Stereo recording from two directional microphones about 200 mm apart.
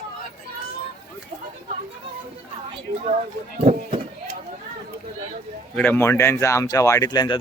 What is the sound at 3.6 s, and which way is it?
Speech, 30° right (ahead or behind).